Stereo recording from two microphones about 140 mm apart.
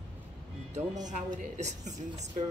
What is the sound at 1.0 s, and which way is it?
Speech, 60° right (ahead or behind).